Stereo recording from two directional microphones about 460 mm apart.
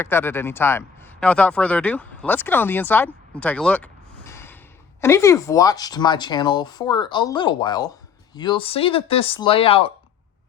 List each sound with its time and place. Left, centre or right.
0.0 s speech: centre
4.3 s a sound: centre
4.9 s speech: centre